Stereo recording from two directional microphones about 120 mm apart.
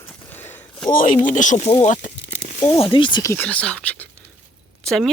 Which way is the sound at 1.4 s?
90° left.